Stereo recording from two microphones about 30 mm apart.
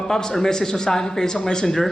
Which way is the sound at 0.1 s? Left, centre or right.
Centre.